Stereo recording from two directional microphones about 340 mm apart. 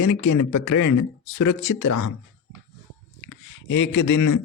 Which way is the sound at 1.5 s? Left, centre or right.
Left.